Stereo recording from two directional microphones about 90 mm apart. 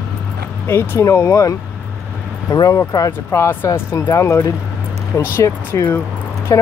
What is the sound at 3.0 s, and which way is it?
Speech, 25° left (ahead or behind).